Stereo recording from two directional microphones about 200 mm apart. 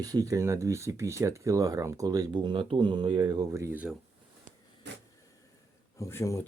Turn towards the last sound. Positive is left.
turn(degrees=15)  # may be behind; listen again after turning